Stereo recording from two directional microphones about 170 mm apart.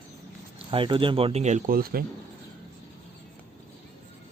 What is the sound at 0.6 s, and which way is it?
Speech, 30° right (ahead or behind).